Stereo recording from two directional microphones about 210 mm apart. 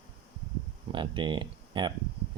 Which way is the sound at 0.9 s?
25° right (ahead or behind).